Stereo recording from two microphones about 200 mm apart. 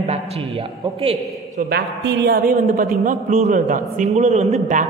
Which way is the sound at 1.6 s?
60° right (ahead or behind).